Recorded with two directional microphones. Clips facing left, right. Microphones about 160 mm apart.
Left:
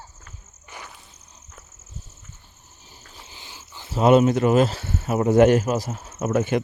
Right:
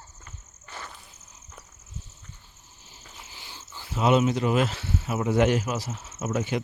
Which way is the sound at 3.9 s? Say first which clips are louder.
Left 6 dB; 50° left (ahead or behind).